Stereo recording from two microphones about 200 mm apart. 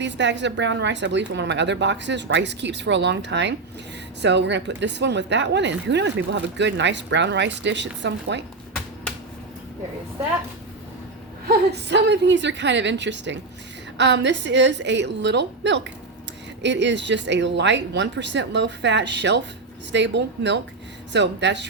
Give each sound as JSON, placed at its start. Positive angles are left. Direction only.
{"t": 0.0, "sound": "a woman's voice", "side_deg": -60}
{"t": 11.4, "sound": "a woman's voice", "side_deg": -55}